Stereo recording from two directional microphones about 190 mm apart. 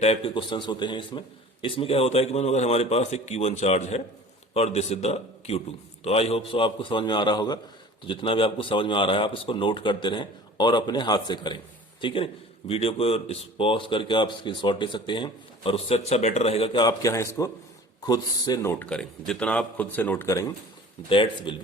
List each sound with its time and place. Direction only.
0.0 s a man's voice: 30° left (ahead or behind)
18.7 s speech: 5° left (ahead or behind)
21.1 s a man's voice: 25° left (ahead or behind)